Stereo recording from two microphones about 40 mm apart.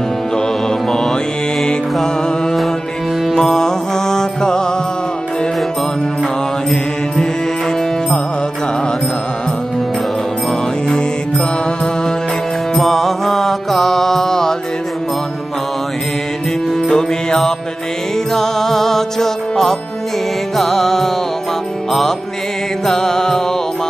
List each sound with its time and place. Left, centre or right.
0.8 s music: centre
3.3 s music: centre
10.9 s mantra: centre
12.7 s mantra: centre
16.8 s music: centre
22.8 s music: centre